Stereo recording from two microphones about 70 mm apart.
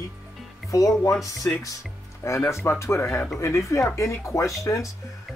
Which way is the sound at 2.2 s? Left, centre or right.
Left.